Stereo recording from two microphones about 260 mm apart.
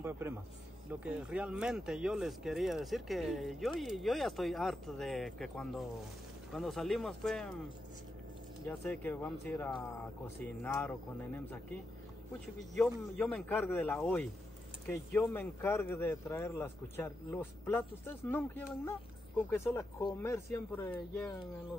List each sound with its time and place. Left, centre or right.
0.0 s a man's voice: centre
8.6 s speech: centre
9.7 s speech: centre
10.6 s speech: centre
12.7 s speech: centre